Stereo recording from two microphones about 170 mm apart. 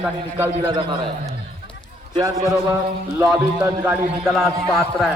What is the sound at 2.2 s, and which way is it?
A man's voice, 20° right (ahead or behind).